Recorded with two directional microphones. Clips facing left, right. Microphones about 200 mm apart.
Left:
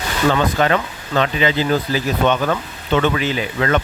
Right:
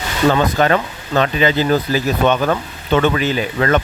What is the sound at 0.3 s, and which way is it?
Speech, 40° right (ahead or behind).